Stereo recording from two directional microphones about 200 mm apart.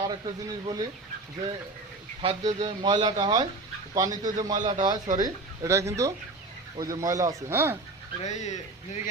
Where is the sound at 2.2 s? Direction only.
30° right (ahead or behind); by 7.8 s 10° right (ahead or behind).